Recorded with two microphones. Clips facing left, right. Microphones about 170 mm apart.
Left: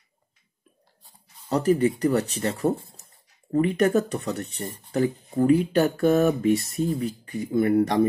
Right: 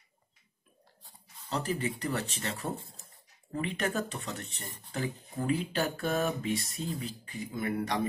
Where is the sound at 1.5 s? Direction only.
35° left (ahead or behind).